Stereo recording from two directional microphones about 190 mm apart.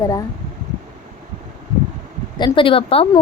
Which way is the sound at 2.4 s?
25° left (ahead or behind).